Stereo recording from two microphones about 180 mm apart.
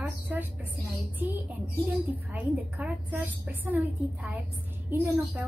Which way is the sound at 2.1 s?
10° right (ahead or behind).